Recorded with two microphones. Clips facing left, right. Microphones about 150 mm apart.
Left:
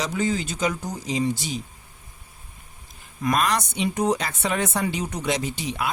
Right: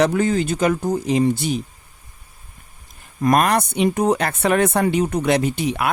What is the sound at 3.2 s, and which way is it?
Speech, 55° right (ahead or behind).